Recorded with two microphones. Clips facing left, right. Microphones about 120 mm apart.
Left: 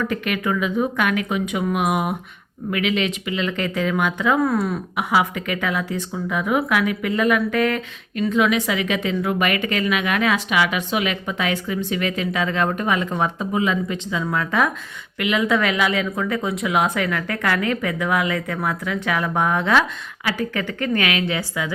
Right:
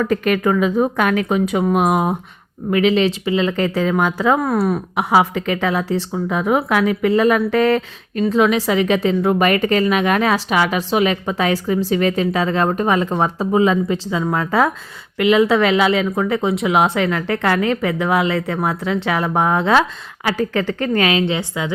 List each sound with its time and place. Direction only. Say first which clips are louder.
0.0 s speech: right 6 dB; 40° right (ahead or behind)